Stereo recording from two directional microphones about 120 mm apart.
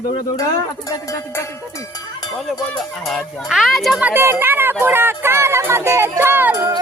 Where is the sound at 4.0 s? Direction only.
20° right (ahead or behind).